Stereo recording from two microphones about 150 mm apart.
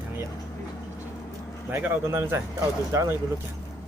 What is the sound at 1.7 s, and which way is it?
Speech, 15° right (ahead or behind).